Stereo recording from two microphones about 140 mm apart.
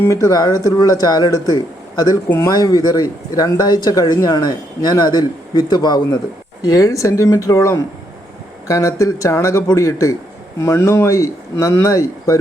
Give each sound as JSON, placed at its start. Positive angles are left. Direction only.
{"t": 0.0, "sound": "speech", "side_deg": 20}